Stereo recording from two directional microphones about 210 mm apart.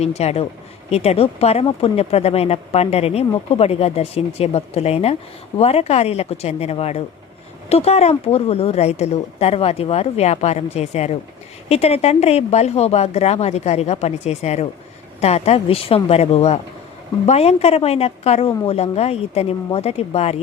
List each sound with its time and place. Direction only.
0.0 s a woman's voice: 30° left (ahead or behind)